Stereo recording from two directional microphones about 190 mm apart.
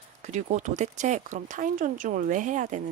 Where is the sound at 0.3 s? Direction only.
40° right (ahead or behind).